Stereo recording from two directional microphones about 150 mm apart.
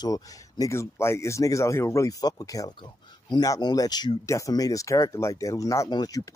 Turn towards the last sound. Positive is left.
turn(degrees=25)  # may be behind; listen again after turning